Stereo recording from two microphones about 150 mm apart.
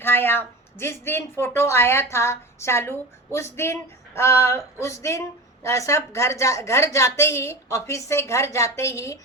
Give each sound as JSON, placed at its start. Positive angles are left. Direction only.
{"t": 0.0, "sound": "a woman's voice", "side_deg": 15}